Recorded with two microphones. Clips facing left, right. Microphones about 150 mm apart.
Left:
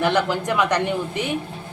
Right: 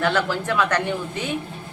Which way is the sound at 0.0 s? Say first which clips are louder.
Left 2 dB; 15° left (ahead or behind).